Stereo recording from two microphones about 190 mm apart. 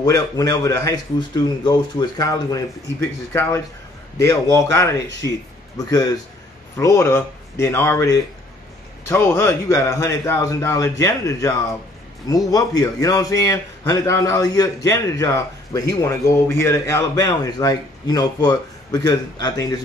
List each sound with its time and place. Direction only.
0.0 s a man's voice: 20° left (ahead or behind)